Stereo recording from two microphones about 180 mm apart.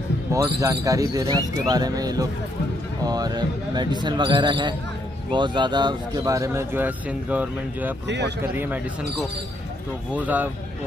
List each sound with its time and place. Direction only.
0.3 s speech: 15° right (ahead or behind)
10.1 s speech: 10° right (ahead or behind)